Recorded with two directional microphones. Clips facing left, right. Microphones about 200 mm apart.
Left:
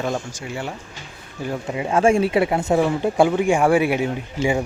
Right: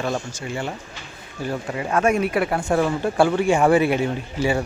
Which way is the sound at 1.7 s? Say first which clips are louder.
Left 3 dB; 20° left (ahead or behind).